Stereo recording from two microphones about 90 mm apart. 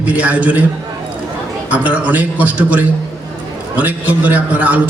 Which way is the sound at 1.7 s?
15° right (ahead or behind).